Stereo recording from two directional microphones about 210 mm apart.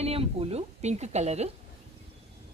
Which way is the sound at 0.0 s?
30° right (ahead or behind).